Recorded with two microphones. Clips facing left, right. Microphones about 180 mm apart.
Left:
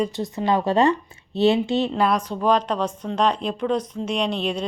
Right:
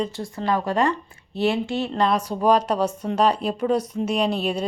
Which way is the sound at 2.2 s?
10° right (ahead or behind).